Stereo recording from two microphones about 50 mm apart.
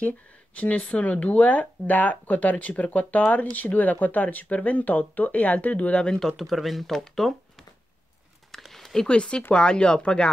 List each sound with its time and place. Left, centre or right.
0.6 s speech: left
6.0 s speech: centre
8.5 s a sound: centre
9.0 s speech: centre